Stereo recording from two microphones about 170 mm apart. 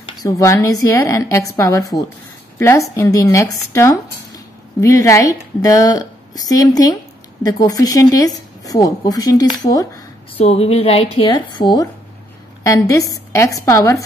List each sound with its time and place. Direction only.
0.2 s a woman's voice: 20° left (ahead or behind)
10.3 s a woman's voice: 35° left (ahead or behind); by 13.9 s 20° left (ahead or behind)